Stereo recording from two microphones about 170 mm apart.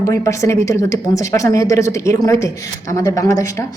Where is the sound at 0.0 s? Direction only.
20° left (ahead or behind).